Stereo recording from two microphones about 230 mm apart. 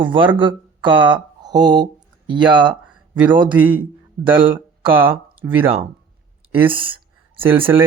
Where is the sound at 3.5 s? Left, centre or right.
Centre.